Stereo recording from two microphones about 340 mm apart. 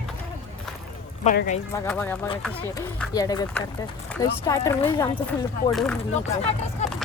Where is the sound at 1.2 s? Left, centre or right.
Left.